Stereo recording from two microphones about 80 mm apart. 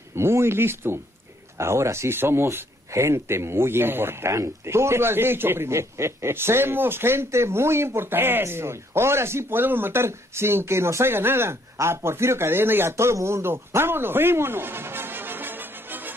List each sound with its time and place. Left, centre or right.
0.1 s speech: right